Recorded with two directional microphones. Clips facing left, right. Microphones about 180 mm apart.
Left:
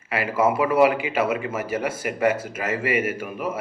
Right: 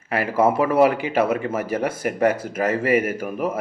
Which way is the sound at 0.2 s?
35° right (ahead or behind).